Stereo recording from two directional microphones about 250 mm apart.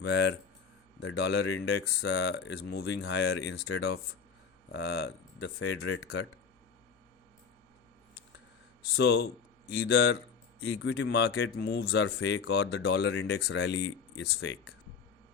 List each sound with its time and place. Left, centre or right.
0.0 s speech: left
9.0 s speech: left